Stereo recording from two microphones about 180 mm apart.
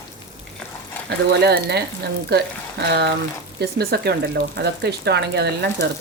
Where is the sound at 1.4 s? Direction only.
65° right (ahead or behind).